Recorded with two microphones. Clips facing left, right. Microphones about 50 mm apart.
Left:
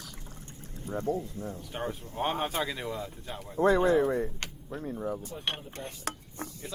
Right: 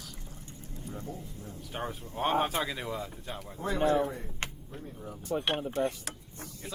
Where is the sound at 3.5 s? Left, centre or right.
Left.